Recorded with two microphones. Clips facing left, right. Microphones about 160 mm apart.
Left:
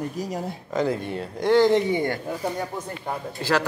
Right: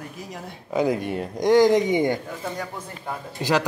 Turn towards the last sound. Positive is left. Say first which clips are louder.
# right 1 dB
turn(degrees=-15)  # may be behind; listen again after turning